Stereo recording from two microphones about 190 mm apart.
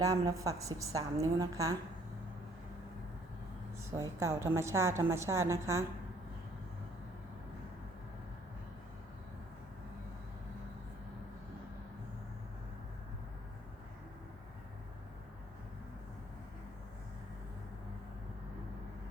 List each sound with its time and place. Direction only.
0.0 s a woman's voice: 20° right (ahead or behind)
3.9 s a woman's voice: 15° right (ahead or behind)